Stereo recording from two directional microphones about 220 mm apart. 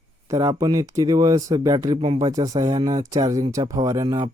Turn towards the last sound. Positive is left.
turn(degrees=-20)  # may be behind; listen again after turning